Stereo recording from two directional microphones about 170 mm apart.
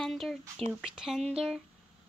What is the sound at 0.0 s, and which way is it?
Speech, centre (ahead or behind).